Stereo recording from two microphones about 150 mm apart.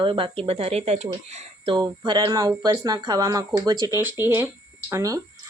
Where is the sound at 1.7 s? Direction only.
30° right (ahead or behind).